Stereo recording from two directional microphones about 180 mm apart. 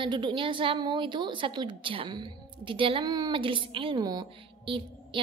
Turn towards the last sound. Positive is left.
turn(degrees=-30)  # may be behind; listen again after turning